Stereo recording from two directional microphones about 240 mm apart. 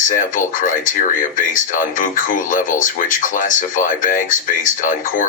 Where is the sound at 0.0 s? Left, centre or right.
Left.